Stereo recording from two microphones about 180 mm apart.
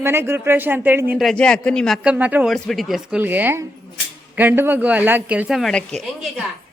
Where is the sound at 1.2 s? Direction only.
5° left (ahead or behind).